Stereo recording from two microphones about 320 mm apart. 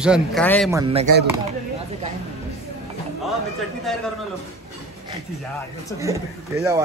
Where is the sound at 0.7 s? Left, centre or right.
Centre.